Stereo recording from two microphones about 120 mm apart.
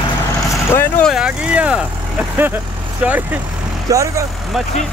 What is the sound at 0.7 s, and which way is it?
Speech, 15° left (ahead or behind).